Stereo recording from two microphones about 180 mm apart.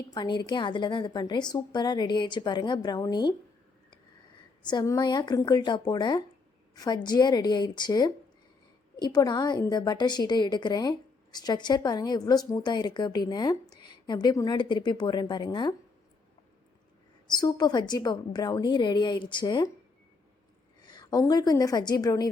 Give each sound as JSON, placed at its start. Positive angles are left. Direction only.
{"t": 0.1, "sound": "a woman's voice", "side_deg": 25}
{"t": 4.6, "sound": "a woman's voice", "side_deg": 20}
{"t": 17.2, "sound": "a woman's voice", "side_deg": 25}
{"t": 20.8, "sound": "a woman's voice", "side_deg": 20}